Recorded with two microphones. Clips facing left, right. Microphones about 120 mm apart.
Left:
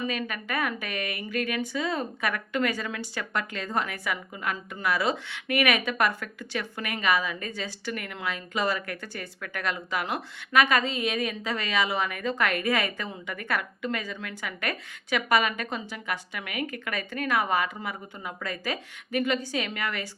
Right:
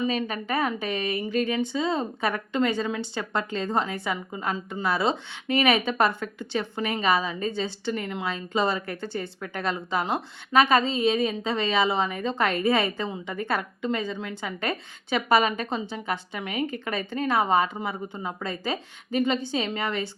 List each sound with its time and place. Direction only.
0.1 s a woman's voice: 30° right (ahead or behind)